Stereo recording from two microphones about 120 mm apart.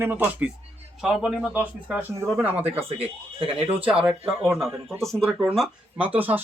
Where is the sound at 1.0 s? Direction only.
5° right (ahead or behind).